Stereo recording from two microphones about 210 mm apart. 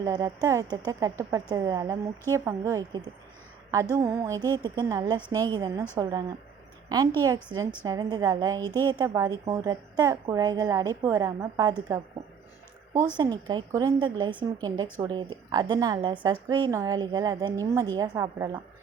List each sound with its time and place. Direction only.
0.0 s a woman's voice: 15° right (ahead or behind)
13.1 s a woman's voice: 20° right (ahead or behind)